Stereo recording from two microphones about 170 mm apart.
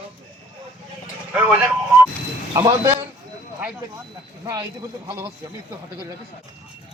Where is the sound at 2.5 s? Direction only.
15° right (ahead or behind).